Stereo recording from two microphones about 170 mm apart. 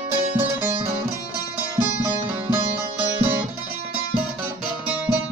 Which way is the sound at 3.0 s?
10° right (ahead or behind).